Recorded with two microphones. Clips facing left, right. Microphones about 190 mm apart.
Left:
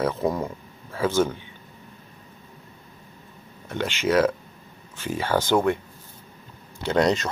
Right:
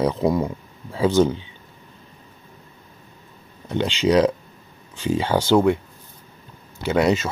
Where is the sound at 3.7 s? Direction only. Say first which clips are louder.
Right 4 dB; 15° right (ahead or behind).